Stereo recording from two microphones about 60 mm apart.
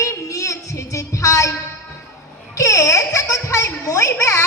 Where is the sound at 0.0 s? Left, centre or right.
Left.